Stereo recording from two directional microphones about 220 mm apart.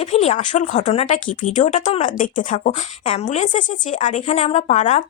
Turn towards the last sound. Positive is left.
turn(degrees=30)  # may be behind; listen again after turning